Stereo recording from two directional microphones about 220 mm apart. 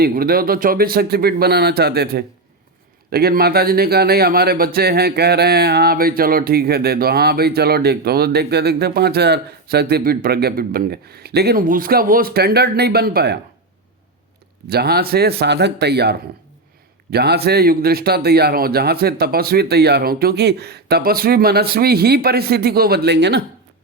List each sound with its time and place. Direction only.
0.0 s speech: 40° right (ahead or behind)
14.7 s speech: 45° right (ahead or behind)